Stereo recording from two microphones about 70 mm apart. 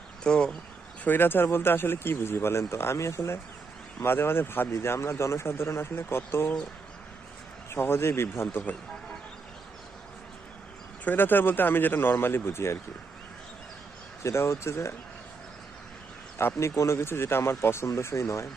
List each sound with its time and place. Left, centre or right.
0.3 s speech: centre
1.0 s a man's voice: left
7.7 s a man's voice: left
11.0 s a man's voice: left
14.3 s a man's voice: left
16.4 s a man's voice: left